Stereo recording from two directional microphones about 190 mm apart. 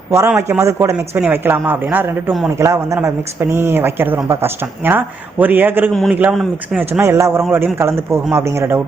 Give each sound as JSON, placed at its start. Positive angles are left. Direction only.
{"t": 0.3, "sound": "speech", "side_deg": -10}
{"t": 5.9, "sound": "speech", "side_deg": 0}
{"t": 7.0, "sound": "speech", "side_deg": -15}